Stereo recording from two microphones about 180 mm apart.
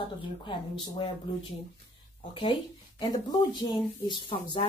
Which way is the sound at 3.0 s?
25° left (ahead or behind).